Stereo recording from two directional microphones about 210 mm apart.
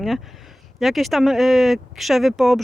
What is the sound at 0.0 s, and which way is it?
Speech, centre (ahead or behind).